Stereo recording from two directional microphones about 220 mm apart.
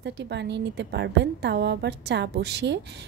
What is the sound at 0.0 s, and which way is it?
A woman's voice, 50° right (ahead or behind).